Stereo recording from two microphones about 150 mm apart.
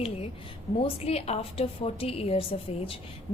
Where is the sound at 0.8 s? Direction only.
40° left (ahead or behind).